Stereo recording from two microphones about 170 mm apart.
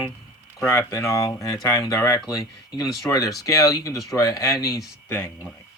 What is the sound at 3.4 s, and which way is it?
Speech, 20° left (ahead or behind).